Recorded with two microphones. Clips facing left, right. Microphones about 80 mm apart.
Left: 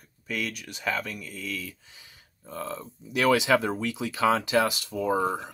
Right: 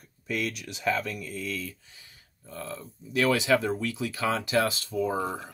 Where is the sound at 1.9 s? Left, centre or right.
Left.